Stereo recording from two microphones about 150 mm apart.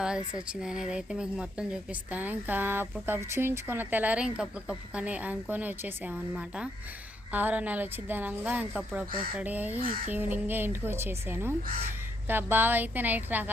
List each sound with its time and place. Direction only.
0.0 s a woman's voice: 5° right (ahead or behind)
9.8 s speech: 70° right (ahead or behind)
10.1 s a woman's voice: 10° right (ahead or behind)